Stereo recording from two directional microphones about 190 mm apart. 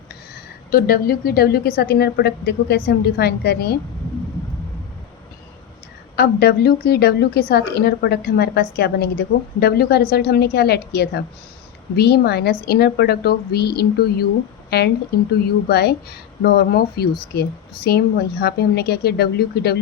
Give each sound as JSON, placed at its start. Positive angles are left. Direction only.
{"t": 0.7, "sound": "a woman's voice", "side_deg": 50}
{"t": 6.1, "sound": "a woman's voice", "side_deg": 55}
{"t": 15.4, "sound": "a woman's voice", "side_deg": 55}